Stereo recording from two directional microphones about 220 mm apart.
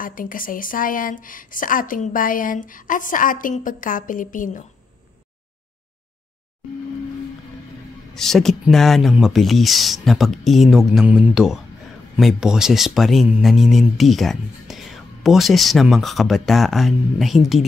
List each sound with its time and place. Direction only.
0.0 s speech: 40° left (ahead or behind)
8.1 s speech: centre (ahead or behind)